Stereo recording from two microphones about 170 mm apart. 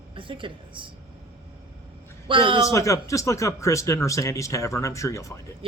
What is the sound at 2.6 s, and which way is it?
A man's voice, 20° left (ahead or behind).